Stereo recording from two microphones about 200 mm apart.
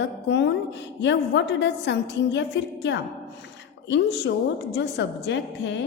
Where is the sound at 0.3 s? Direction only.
60° left (ahead or behind).